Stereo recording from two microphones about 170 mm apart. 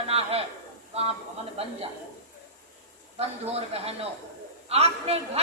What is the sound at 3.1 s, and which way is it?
A man's voice, 35° right (ahead or behind).